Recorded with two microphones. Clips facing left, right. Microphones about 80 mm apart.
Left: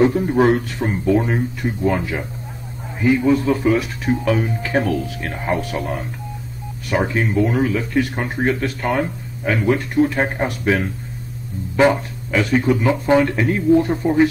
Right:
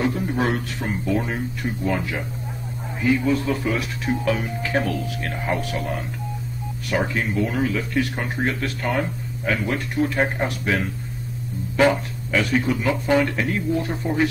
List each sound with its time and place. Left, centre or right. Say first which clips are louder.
0.0 s speech: left 8 dB; left
3.7 s speech: left 5 dB; centre
11.7 s speech: left 3 dB; left